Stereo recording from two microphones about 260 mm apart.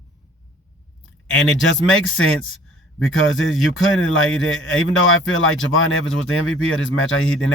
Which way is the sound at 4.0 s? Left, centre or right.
Left.